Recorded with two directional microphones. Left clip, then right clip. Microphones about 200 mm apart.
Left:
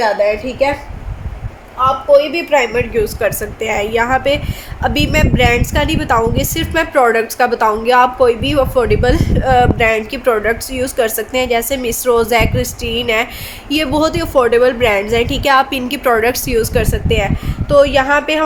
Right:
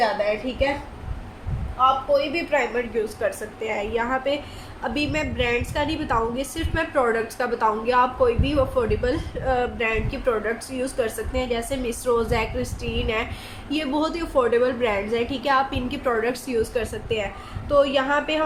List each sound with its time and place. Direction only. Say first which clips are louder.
2.3 s a woman's voice: left 9 dB; 50° left (ahead or behind)